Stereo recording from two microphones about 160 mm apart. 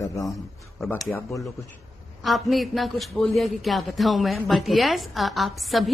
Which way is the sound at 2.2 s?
Centre (ahead or behind).